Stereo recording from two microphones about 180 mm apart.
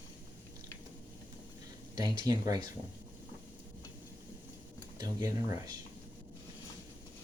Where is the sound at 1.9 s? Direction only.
20° right (ahead or behind).